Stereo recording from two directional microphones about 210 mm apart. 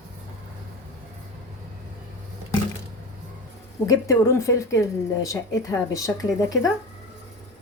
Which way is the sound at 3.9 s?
15° left (ahead or behind).